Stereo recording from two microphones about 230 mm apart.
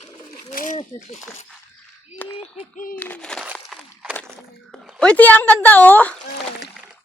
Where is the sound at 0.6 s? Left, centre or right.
Left.